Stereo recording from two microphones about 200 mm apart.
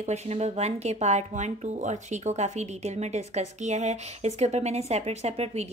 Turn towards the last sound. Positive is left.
turn(degrees=-30)  # may be behind; listen again after turning